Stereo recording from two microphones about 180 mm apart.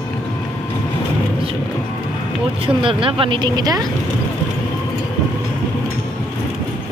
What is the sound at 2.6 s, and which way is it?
Speech, 30° right (ahead or behind).